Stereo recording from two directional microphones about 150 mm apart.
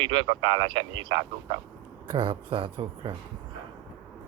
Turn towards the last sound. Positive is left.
turn(degrees=-35)  # may be behind; listen again after turning